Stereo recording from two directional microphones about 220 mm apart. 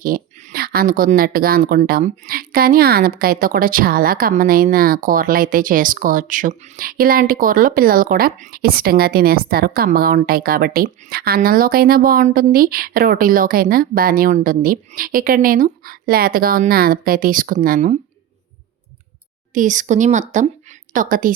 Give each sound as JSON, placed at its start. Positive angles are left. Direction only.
{"t": 0.0, "sound": "speech", "side_deg": -35}
{"t": 19.5, "sound": "a woman's voice", "side_deg": -35}